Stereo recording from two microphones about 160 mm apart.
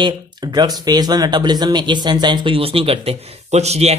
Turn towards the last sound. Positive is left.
turn(degrees=-40)  # may be behind; listen again after turning